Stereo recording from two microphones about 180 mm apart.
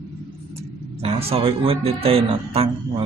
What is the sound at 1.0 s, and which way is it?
Speech, 30° right (ahead or behind).